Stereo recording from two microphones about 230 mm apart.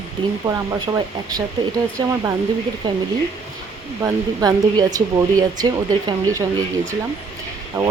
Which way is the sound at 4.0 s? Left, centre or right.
Centre.